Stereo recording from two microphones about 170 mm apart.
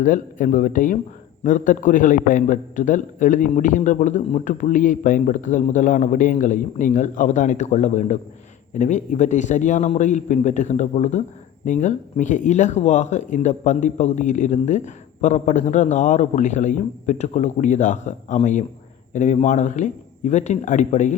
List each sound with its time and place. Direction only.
0.0 s speech: 50° left (ahead or behind)